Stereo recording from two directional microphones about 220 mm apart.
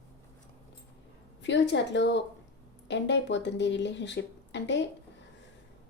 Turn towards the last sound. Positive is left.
turn(degrees=55)  # may be behind; listen again after turning